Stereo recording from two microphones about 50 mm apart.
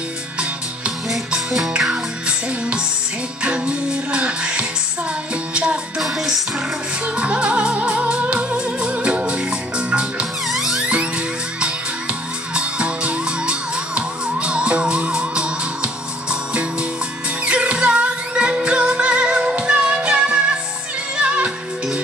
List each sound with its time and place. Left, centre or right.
1.8 s music: centre
5.9 s music: centre
7.2 s music: right
10.5 s music: centre
10.8 s music: right